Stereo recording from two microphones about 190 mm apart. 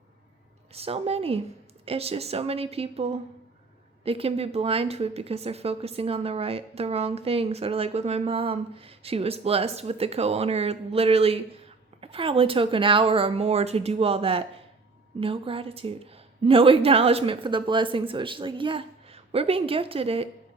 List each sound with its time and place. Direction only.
0.7 s a woman's voice: 30° right (ahead or behind)